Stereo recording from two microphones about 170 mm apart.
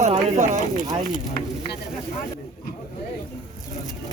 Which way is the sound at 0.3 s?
45° right (ahead or behind).